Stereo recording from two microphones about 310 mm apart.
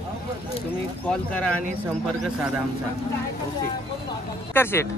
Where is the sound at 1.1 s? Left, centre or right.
Centre.